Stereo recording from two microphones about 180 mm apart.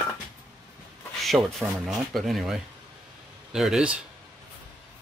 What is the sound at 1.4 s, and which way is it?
Speech, centre (ahead or behind).